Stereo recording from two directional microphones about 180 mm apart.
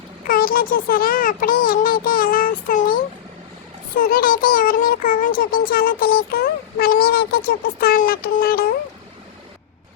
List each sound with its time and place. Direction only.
0.3 s a child's voice: 55° left (ahead or behind)